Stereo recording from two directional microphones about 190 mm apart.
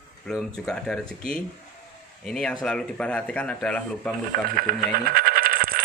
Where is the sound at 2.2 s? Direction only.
5° left (ahead or behind).